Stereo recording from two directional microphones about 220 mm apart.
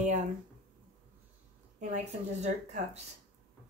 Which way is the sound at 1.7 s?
35° right (ahead or behind).